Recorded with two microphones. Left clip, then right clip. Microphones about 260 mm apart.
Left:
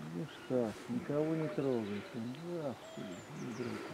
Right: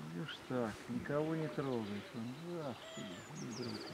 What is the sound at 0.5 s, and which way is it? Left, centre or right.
Speech, centre.